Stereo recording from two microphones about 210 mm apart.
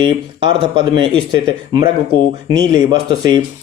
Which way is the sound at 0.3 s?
25° right (ahead or behind).